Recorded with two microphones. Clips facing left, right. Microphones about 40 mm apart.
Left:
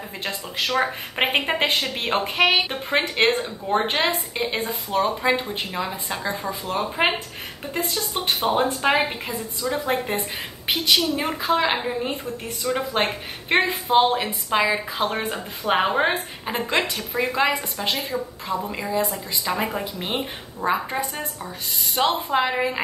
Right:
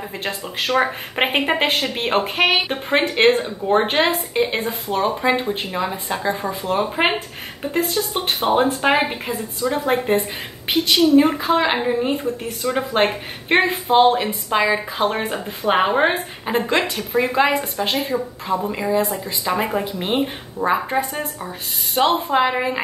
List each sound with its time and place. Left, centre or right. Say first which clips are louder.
0.2 s a woman's voice: right 1 dB; centre
18.7 s a woman's voice: right 5 dB; centre